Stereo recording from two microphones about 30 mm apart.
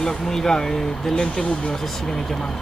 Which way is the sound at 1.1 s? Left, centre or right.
Left.